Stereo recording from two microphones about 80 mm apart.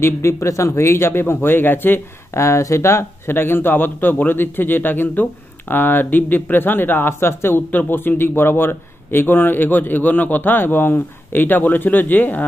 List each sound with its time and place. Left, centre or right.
0.0 s speech: left
2.4 s speech: left